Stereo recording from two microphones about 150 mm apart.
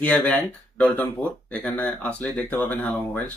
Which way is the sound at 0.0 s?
10° left (ahead or behind).